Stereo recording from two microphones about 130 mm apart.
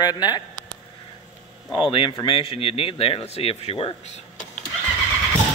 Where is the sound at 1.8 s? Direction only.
40° left (ahead or behind).